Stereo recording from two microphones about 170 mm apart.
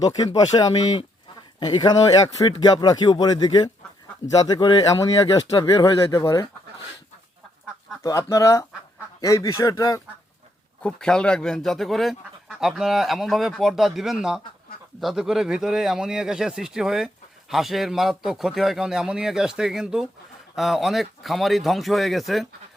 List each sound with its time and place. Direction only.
0.5 s speech: 25° left (ahead or behind)
8.0 s speech: 20° left (ahead or behind)
10.8 s speech: 5° left (ahead or behind)